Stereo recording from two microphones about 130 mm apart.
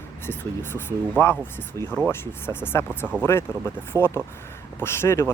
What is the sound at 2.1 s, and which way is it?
Speech, 15° left (ahead or behind).